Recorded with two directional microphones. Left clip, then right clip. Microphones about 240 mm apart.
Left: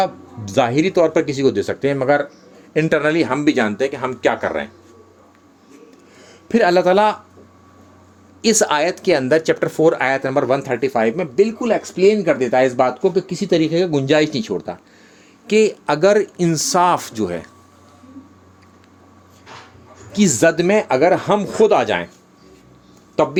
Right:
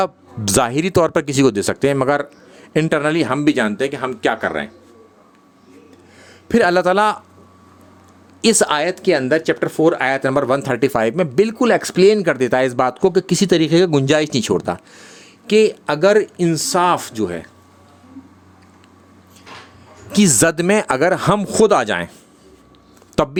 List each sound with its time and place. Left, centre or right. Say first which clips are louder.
0.0 s speech: even; right; by 4.7 s centre
6.5 s a man's voice: even; right
8.4 s speech: even; right
15.4 s speech: right 1 dB; centre
20.1 s speech: even; right
23.2 s speech: left 1 dB; right